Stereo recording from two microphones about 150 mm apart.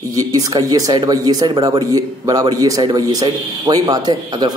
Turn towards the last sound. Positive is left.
turn(degrees=-30)  # may be behind; listen again after turning